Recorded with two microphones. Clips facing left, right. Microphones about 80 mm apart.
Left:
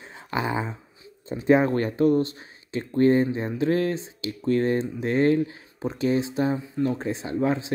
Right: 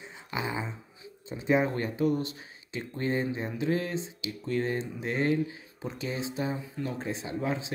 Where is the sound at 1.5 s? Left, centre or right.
Left.